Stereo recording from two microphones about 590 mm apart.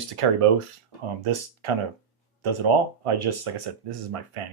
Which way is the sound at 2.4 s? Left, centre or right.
Right.